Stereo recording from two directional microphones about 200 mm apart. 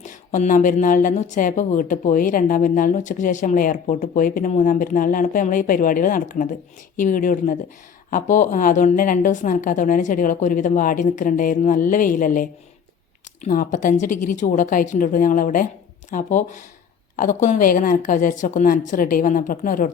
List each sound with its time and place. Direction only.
0.0 s a woman's voice: 40° left (ahead or behind)